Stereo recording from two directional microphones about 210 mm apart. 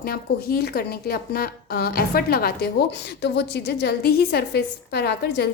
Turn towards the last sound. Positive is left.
turn(degrees=50)  # may be behind; listen again after turning